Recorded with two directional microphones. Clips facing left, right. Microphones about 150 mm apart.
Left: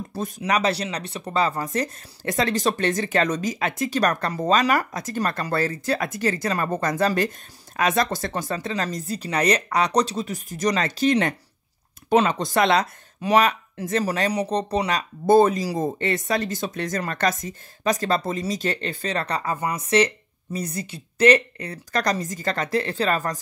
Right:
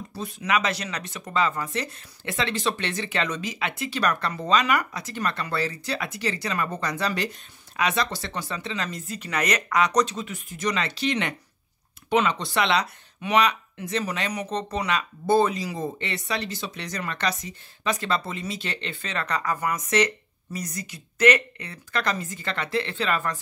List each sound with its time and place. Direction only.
0.4 s speech: 35° left (ahead or behind)